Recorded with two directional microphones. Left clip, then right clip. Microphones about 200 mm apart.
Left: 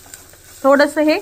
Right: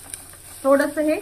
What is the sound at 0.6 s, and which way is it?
Speech, 50° left (ahead or behind).